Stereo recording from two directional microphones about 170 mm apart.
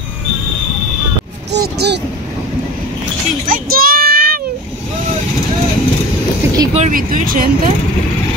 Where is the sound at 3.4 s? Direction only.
55° right (ahead or behind).